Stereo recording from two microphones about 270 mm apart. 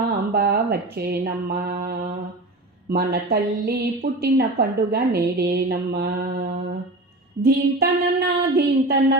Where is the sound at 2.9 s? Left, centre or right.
Right.